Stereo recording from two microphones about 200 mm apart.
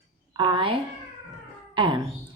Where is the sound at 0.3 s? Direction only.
25° right (ahead or behind).